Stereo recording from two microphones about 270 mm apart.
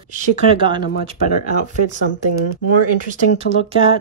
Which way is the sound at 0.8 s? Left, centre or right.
Left.